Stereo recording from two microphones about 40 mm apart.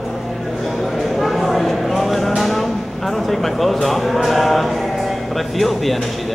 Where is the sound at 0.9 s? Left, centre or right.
Centre.